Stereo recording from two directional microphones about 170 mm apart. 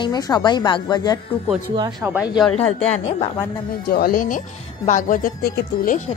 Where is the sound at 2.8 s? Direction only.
40° left (ahead or behind).